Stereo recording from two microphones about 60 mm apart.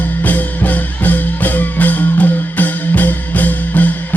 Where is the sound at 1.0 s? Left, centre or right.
Left.